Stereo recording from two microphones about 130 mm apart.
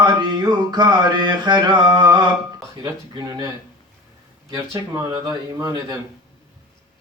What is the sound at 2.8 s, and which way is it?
Speech, 25° right (ahead or behind).